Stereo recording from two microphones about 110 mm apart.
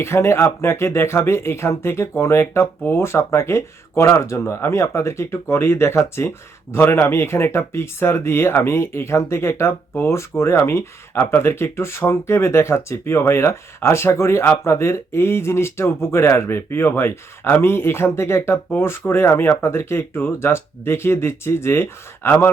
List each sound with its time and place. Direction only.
0.0 s speech: 25° left (ahead or behind)